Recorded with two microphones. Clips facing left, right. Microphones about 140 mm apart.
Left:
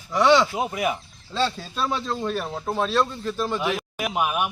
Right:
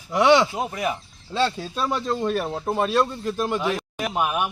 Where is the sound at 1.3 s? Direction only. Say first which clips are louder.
Right 2 dB; 10° right (ahead or behind).